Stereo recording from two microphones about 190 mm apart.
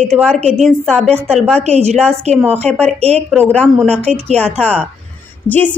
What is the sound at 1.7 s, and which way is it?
Speech, 35° right (ahead or behind).